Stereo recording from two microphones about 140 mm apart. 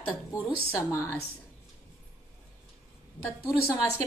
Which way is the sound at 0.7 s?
20° left (ahead or behind).